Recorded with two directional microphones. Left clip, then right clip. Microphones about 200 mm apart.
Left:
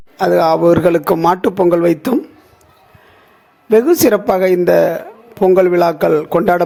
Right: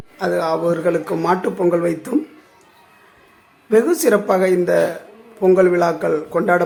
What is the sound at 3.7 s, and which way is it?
Speech, 35° left (ahead or behind).